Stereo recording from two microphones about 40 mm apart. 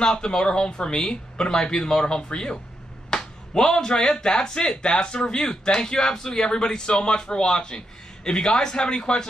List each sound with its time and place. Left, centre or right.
0.0 s speech: centre